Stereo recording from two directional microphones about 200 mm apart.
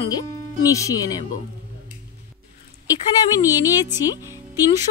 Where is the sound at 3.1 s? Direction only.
20° left (ahead or behind).